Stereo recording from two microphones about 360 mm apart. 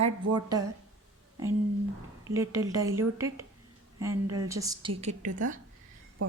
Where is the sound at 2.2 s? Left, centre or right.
Centre.